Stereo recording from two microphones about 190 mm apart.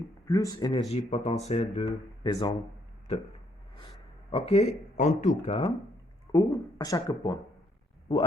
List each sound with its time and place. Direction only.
0.3 s speech: 20° left (ahead or behind)
2.3 s speech: 20° left (ahead or behind)
4.3 s speech: 30° left (ahead or behind)
6.3 s speech: 20° left (ahead or behind)